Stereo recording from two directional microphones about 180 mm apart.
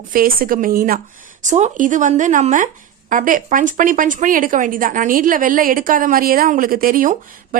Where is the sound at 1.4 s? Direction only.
40° right (ahead or behind).